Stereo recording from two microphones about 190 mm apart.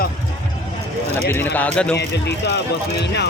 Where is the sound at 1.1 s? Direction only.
10° left (ahead or behind).